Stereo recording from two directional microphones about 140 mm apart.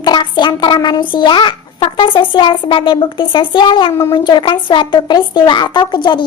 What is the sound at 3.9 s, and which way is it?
Speech, 20° left (ahead or behind).